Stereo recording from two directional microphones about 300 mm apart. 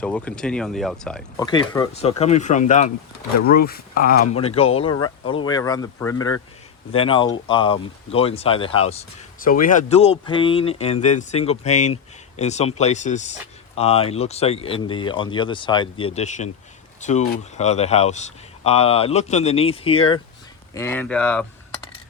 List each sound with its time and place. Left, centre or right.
0.0 s speech: centre
1.5 s speech: centre
20.7 s speech: centre